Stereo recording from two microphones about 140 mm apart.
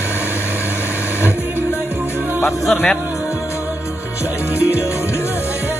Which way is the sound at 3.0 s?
20° left (ahead or behind).